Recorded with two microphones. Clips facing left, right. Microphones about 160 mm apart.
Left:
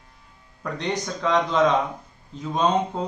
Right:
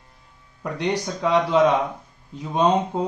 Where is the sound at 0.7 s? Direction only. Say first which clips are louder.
Right 3 dB; 10° right (ahead or behind).